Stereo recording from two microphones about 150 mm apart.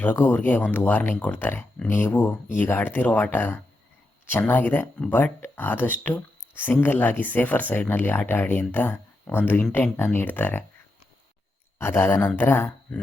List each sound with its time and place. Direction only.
0.0 s speech: 15° left (ahead or behind)
11.8 s speech: 15° left (ahead or behind)